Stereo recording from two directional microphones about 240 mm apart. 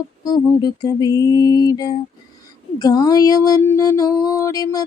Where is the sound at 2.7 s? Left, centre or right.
Centre.